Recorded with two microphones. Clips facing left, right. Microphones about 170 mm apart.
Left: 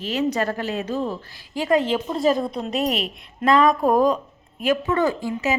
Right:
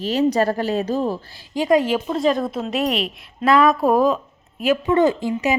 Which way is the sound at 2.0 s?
5° left (ahead or behind).